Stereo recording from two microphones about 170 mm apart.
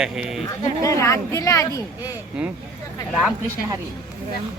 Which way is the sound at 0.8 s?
20° left (ahead or behind).